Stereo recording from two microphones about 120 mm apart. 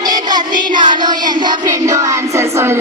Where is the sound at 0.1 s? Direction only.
35° right (ahead or behind).